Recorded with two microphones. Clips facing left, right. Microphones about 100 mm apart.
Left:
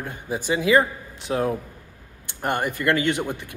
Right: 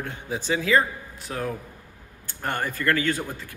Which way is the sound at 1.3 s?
30° left (ahead or behind).